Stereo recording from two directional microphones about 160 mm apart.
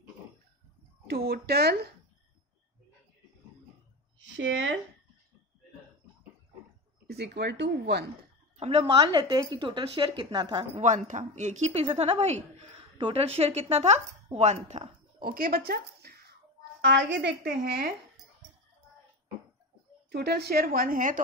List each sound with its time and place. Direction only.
1.0 s a woman's voice: 70° right (ahead or behind)
7.1 s speech: 90° right
8.5 s a woman's voice: 40° right (ahead or behind)
10.8 s a woman's voice: 50° right (ahead or behind)
15.2 s a woman's voice: 65° right (ahead or behind)
20.1 s a woman's voice: 85° right; by 21.2 s 60° right (ahead or behind)